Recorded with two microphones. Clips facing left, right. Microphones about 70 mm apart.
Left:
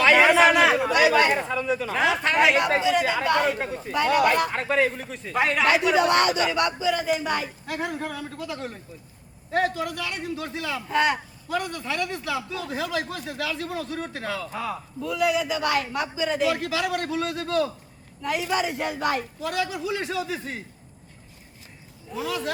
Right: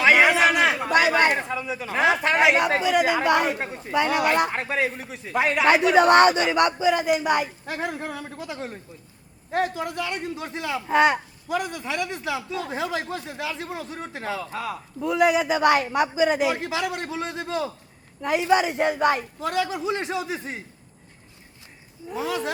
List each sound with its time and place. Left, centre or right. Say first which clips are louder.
0.0 s a sound: left 1 dB; centre
0.9 s speech: right 2 dB; right
1.4 s a man's voice: left 3 dB; centre
2.7 s a man's voice: right 1 dB; centre
4.4 s a man's voice: left 1 dB; right
4.9 s a man's voice: even; centre
5.6 s a man's voice: right 5 dB; right
7.0 s a man's voice: right 4 dB; centre
8.0 s a man's voice: left 1 dB; right
22.1 s a man's voice: right 1 dB; right